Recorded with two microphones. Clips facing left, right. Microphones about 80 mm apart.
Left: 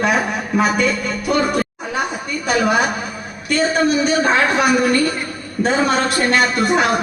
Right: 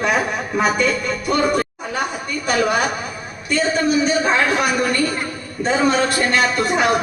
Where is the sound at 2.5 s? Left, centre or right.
Centre.